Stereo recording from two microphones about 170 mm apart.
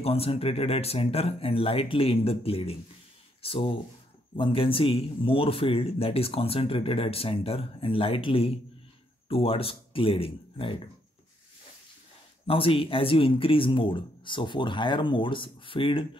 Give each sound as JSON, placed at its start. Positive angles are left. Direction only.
{"t": 0.0, "sound": "speech", "side_deg": 35}
{"t": 12.4, "sound": "speech", "side_deg": 35}